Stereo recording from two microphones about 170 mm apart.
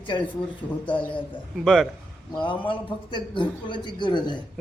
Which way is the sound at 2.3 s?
30° left (ahead or behind).